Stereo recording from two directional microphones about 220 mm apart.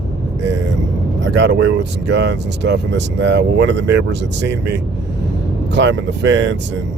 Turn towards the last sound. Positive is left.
turn(degrees=-55)  # may be behind; listen again after turning